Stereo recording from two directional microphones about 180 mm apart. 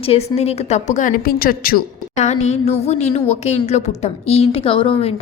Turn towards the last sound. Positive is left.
turn(degrees=30)  # may be behind; listen again after turning